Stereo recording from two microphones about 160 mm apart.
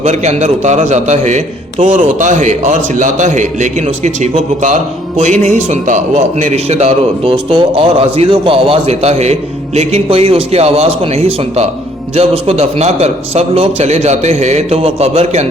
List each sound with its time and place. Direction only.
0.0 s a man's voice: 45° right (ahead or behind)